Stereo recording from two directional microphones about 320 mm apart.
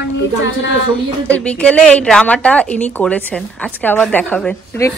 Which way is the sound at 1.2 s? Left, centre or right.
Centre.